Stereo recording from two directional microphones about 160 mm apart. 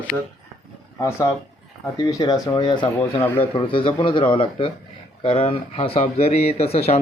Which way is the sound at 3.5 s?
35° left (ahead or behind).